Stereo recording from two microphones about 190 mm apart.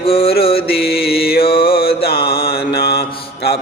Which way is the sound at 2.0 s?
55° left (ahead or behind).